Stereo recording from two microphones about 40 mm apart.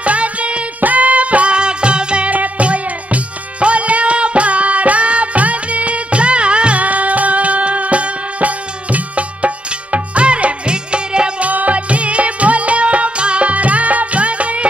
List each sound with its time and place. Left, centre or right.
0.0 s music: right
2.3 s music: right
11.4 s music: right